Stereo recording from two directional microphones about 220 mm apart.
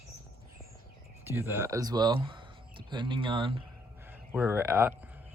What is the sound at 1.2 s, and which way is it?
Speech, 10° right (ahead or behind).